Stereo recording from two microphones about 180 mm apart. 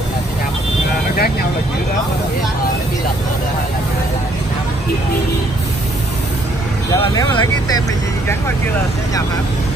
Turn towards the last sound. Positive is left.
turn(degrees=20)  # may be behind; listen again after turning